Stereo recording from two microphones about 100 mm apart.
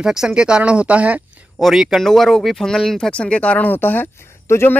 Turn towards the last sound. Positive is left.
turn(degrees=25)  # may be behind; listen again after turning